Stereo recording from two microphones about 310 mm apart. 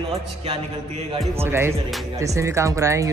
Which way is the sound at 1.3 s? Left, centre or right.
Centre.